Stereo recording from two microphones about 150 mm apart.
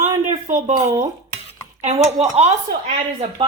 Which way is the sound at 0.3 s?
55° right (ahead or behind).